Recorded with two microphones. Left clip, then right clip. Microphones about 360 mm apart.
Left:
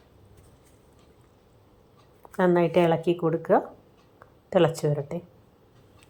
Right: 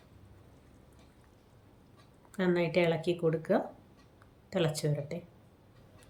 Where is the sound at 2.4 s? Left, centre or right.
Left.